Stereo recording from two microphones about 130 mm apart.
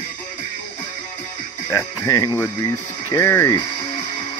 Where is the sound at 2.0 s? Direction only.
25° left (ahead or behind).